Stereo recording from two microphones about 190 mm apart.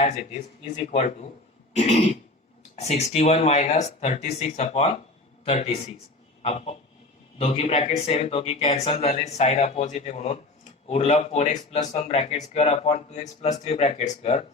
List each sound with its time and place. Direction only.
1.7 s speech: 35° left (ahead or behind)
6.4 s a sound: 35° left (ahead or behind)
7.3 s speech: 30° left (ahead or behind)